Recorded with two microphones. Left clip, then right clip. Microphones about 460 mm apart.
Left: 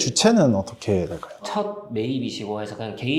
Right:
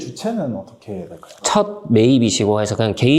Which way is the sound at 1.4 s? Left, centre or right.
Right.